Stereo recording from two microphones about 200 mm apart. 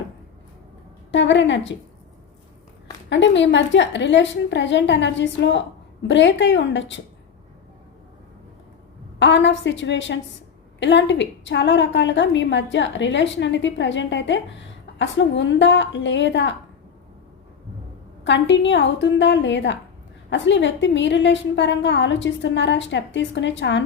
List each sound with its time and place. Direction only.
1.1 s a woman's voice: 65° left (ahead or behind)
3.1 s a woman's voice: 65° left (ahead or behind)
9.1 s a woman's voice: 65° left (ahead or behind)
18.2 s a woman's voice: 65° left (ahead or behind)